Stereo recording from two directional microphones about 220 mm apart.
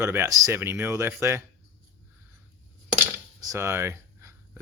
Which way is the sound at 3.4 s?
15° right (ahead or behind).